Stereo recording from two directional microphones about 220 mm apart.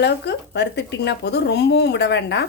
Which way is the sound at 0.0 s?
50° left (ahead or behind).